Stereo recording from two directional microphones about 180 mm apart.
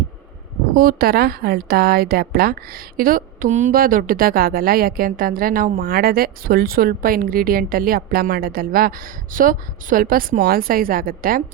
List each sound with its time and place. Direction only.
0.8 s a woman's voice: 55° right (ahead or behind)